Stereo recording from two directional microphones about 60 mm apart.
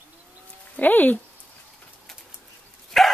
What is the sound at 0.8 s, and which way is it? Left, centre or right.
Speech, left.